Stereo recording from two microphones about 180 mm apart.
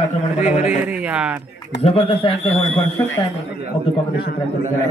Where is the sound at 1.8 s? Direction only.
35° left (ahead or behind).